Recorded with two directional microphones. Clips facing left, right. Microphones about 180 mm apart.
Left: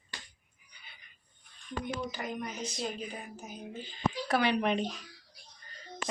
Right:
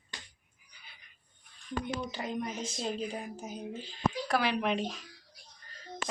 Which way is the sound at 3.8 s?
Centre (ahead or behind).